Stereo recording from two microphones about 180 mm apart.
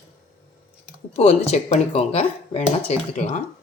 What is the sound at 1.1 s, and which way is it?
Speech, 35° left (ahead or behind).